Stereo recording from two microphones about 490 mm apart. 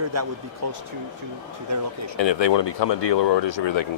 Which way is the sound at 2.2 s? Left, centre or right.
Left.